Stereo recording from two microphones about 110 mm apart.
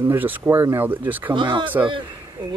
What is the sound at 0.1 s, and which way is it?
Speech, 20° right (ahead or behind).